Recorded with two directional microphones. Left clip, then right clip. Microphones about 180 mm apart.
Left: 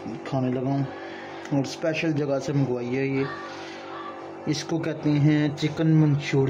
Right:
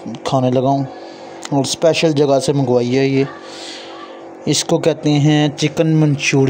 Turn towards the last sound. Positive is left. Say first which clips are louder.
# right 10 dB
turn(degrees=-30)  # may be behind; listen again after turning